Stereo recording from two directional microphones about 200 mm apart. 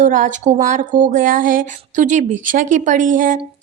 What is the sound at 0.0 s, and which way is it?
A woman's voice, 40° right (ahead or behind).